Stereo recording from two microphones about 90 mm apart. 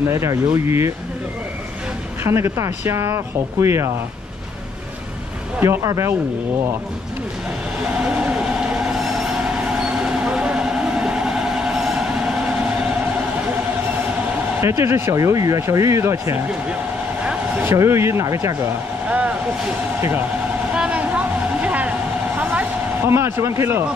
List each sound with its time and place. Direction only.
0.0 s speech: 30° right (ahead or behind)
2.2 s speech: 30° right (ahead or behind)
5.8 s speech: 35° right (ahead or behind)
8.0 s vehicle: 10° right (ahead or behind)
14.6 s speech: 30° right (ahead or behind)
17.2 s a sound: 15° right (ahead or behind)
17.6 s speech: 30° right (ahead or behind)
19.0 s vehicle: 15° right (ahead or behind)
20.7 s vehicle: 10° right (ahead or behind)
23.1 s speech: 30° right (ahead or behind)